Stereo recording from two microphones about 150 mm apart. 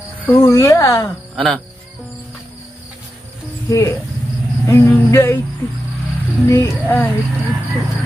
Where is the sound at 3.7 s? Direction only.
20° left (ahead or behind).